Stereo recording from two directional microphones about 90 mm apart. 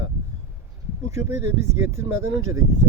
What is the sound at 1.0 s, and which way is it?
Speech, 30° right (ahead or behind).